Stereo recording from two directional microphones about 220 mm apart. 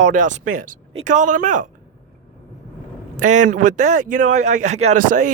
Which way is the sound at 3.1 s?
35° right (ahead or behind).